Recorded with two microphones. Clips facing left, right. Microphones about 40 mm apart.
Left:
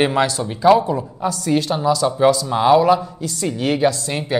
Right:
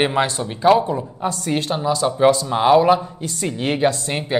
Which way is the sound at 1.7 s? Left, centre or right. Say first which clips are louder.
Left 2 dB; right.